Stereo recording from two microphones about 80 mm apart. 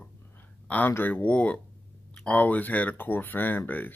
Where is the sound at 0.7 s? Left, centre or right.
Left.